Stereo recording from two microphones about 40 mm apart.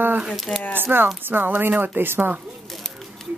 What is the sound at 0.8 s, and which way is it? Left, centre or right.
A woman's voice, right.